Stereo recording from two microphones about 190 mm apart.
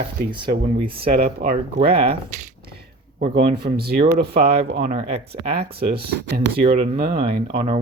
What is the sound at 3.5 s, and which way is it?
Speech, 55° right (ahead or behind).